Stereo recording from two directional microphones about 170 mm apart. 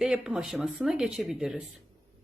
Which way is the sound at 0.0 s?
5° right (ahead or behind).